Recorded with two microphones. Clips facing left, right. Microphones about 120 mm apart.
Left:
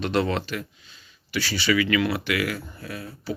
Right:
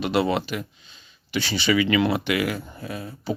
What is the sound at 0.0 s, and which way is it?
Speech, 10° right (ahead or behind).